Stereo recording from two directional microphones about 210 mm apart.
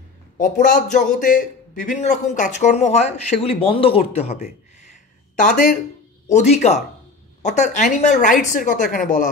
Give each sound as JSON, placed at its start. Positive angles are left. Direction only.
{"t": 0.4, "sound": "a man's voice", "side_deg": 40}